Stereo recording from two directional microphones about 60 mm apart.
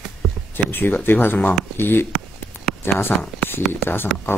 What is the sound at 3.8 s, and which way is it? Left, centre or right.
Speech, left.